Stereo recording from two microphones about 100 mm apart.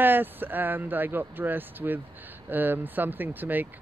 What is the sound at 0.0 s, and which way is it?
Speech, 20° right (ahead or behind).